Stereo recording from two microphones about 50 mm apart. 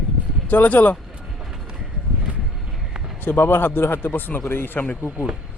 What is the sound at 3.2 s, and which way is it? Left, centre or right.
A man's voice, left.